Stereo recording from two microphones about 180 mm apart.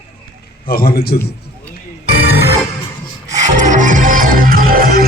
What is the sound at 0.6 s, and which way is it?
Speech, 55° left (ahead or behind).